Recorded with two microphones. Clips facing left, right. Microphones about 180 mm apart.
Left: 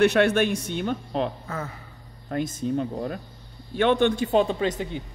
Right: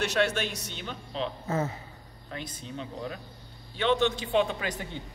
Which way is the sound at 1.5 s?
25° right (ahead or behind).